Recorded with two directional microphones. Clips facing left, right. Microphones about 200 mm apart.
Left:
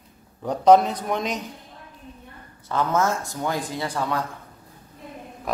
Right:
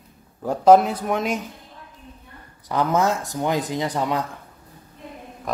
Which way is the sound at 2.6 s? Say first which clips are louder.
Right 2 dB; 15° right (ahead or behind).